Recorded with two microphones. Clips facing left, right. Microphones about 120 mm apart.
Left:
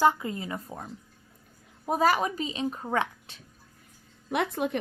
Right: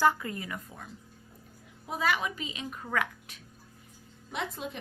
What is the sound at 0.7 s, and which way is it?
Speech, 40° left (ahead or behind).